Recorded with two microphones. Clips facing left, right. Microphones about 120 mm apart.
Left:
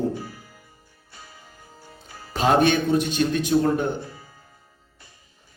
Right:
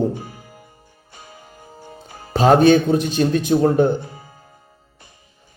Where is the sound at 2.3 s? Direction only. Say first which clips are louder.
Right 7 dB; 35° right (ahead or behind).